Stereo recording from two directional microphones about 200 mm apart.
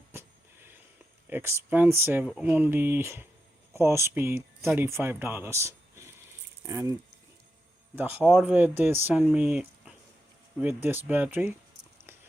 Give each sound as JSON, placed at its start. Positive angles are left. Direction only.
{"t": 0.1, "sound": "a sound", "side_deg": -10}
{"t": 1.3, "sound": "speech", "side_deg": -10}
{"t": 2.2, "sound": "speech", "side_deg": 0}
{"t": 7.9, "sound": "speech", "side_deg": -10}